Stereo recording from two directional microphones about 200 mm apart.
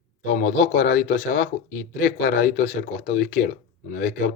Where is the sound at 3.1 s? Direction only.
40° left (ahead or behind).